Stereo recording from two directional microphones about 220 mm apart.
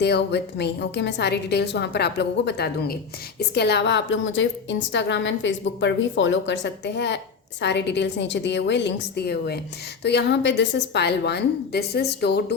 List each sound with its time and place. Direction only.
0.0 s a woman's voice: 50° left (ahead or behind)